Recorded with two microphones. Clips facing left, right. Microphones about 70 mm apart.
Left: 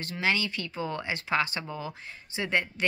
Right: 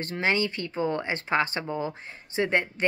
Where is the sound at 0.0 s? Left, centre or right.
Right.